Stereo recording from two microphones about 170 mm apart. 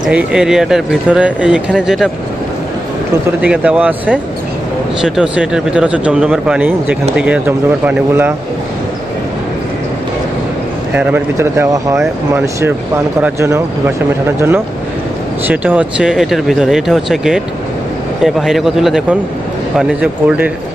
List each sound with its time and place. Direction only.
0.1 s speech: 5° right (ahead or behind)
3.4 s speech: 10° right (ahead or behind)
10.9 s speech: 10° right (ahead or behind)
15.4 s speech: 10° right (ahead or behind)